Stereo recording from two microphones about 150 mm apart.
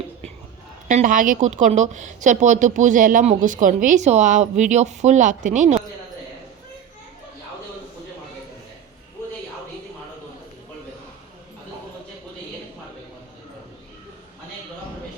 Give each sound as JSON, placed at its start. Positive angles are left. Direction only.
{"t": 0.9, "sound": "a woman's voice", "side_deg": -60}